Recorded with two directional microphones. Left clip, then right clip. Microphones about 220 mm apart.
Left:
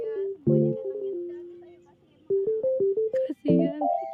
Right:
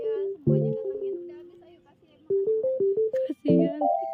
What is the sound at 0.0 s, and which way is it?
Music, 35° right (ahead or behind).